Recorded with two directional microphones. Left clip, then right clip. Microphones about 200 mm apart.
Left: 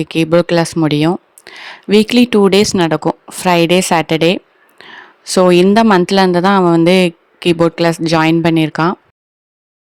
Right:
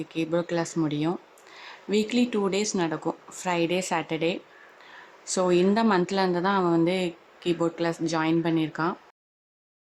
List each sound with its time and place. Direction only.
0.0 s speech: 50° left (ahead or behind)
4.8 s a sound: 45° left (ahead or behind)
5.7 s speech: 50° left (ahead or behind)